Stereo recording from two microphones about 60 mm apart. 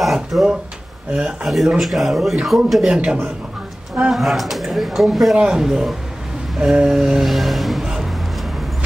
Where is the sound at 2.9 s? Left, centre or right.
Centre.